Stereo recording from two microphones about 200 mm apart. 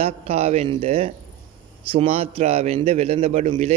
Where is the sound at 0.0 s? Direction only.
30° right (ahead or behind).